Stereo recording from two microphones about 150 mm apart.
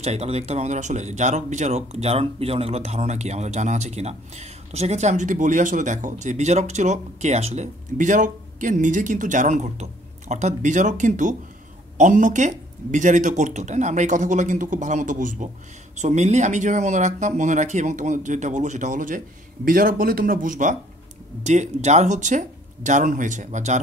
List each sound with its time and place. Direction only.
0.0 s speech: 45° right (ahead or behind); by 20.7 s 60° right (ahead or behind)
21.4 s speech: 50° right (ahead or behind)